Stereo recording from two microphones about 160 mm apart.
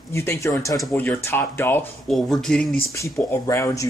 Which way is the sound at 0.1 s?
15° left (ahead or behind).